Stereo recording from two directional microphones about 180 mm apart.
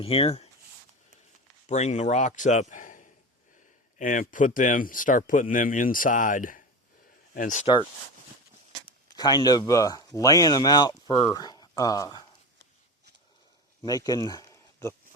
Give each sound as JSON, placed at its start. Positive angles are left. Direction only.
{"t": 0.0, "sound": "speech", "side_deg": 30}
{"t": 1.6, "sound": "speech", "side_deg": 40}
{"t": 9.1, "sound": "speech", "side_deg": 20}
{"t": 13.8, "sound": "speech", "side_deg": 20}